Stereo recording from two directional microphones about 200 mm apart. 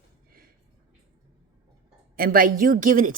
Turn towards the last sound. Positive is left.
turn(degrees=-40)  # may be behind; listen again after turning